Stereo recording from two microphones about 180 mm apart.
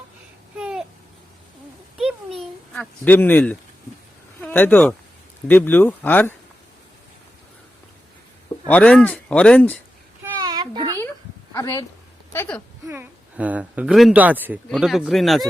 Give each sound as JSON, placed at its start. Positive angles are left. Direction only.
{"t": 0.5, "sound": "babbling", "side_deg": -5}
{"t": 2.4, "sound": "a child's voice", "side_deg": 5}
{"t": 8.7, "sound": "speech", "side_deg": 5}
{"t": 10.4, "sound": "a sound", "side_deg": -20}
{"t": 11.5, "sound": "speech", "side_deg": 20}
{"t": 12.9, "sound": "speech", "side_deg": -10}